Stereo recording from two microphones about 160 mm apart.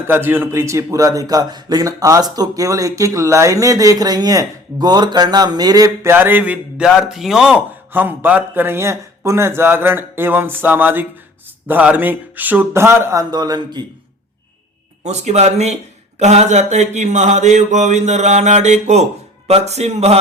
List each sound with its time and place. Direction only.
0.1 s a man's voice: 15° right (ahead or behind)
15.0 s speech: 45° right (ahead or behind)